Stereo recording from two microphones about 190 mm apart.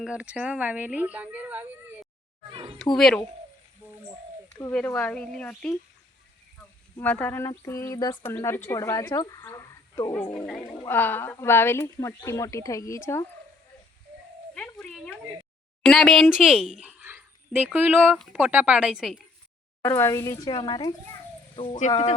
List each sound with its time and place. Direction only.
0.0 s speech: 5° right (ahead or behind)
2.5 s speech: 30° right (ahead or behind)
2.9 s a woman's voice: centre (ahead or behind)
4.4 s speech: 15° left (ahead or behind)
7.0 s speech: 10° left (ahead or behind)
10.1 s a woman's voice: 5° left (ahead or behind)
14.5 s dog: 5° left (ahead or behind)
15.8 s a woman's voice: centre (ahead or behind)
19.8 s speech: 15° left (ahead or behind); by 22.1 s 40° left (ahead or behind)